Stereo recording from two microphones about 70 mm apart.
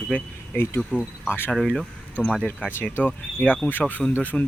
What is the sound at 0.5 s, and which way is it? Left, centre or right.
Speech, left.